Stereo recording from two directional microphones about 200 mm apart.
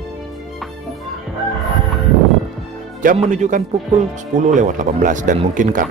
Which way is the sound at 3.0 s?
40° right (ahead or behind).